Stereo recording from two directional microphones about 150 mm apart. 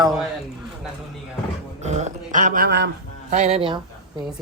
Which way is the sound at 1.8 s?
50° right (ahead or behind).